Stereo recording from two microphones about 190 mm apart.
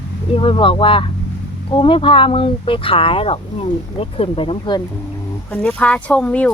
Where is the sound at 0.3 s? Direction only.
25° left (ahead or behind).